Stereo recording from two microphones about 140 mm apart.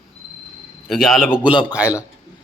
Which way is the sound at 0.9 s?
Centre (ahead or behind).